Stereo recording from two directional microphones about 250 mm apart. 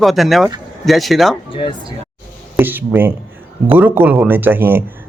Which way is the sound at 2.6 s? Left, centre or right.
Centre.